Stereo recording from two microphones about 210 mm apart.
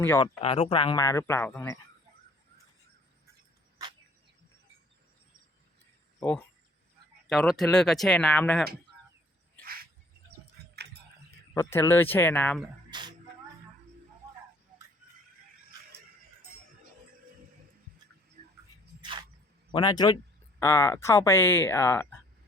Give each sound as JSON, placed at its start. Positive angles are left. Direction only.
{"t": 0.0, "sound": "speech", "side_deg": 10}
{"t": 0.4, "sound": "speech", "side_deg": 25}
{"t": 6.1, "sound": "speech", "side_deg": 5}
{"t": 9.6, "sound": "cricket", "side_deg": -45}
{"t": 10.6, "sound": "a sound", "side_deg": -50}
{"t": 11.5, "sound": "speech", "side_deg": 10}
{"t": 12.9, "sound": "music", "side_deg": -20}
{"t": 19.7, "sound": "a man's voice", "side_deg": 20}